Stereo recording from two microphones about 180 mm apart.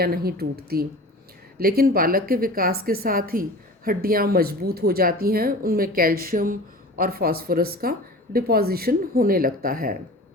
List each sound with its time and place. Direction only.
0.0 s speech: 60° right (ahead or behind)